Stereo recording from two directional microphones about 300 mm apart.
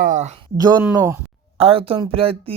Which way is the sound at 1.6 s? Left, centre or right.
Centre.